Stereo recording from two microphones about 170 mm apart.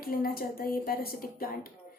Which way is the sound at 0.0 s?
60° left (ahead or behind).